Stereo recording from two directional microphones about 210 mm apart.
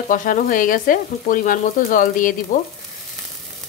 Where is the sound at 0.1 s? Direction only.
40° left (ahead or behind).